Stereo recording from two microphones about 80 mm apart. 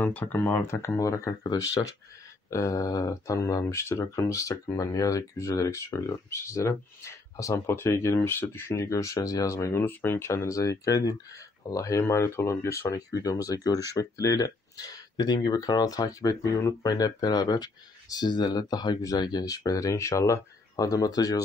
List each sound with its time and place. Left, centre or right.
0.0 s speech: left
8.9 s speech: left
12.0 s speech: left